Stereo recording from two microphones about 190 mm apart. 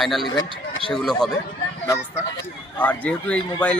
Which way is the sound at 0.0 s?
Centre (ahead or behind).